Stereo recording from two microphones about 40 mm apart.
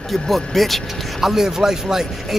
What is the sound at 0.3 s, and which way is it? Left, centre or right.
Speech, centre.